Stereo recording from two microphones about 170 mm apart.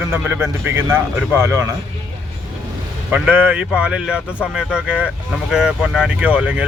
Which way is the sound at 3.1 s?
10° right (ahead or behind).